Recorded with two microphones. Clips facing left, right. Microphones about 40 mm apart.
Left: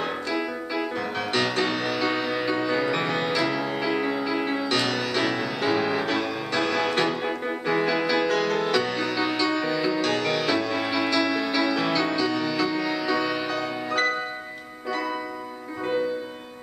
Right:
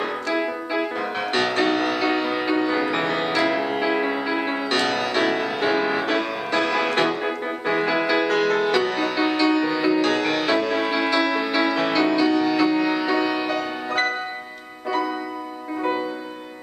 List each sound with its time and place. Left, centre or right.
0.3 s music: right
1.3 s music: centre